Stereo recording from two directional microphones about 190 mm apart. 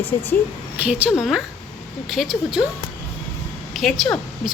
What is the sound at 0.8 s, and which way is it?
Speech, 5° right (ahead or behind).